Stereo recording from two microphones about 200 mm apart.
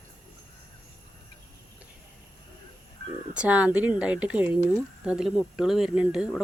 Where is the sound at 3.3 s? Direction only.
5° right (ahead or behind).